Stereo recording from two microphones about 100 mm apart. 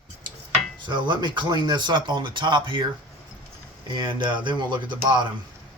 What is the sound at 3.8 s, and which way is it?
Speech, 50° right (ahead or behind).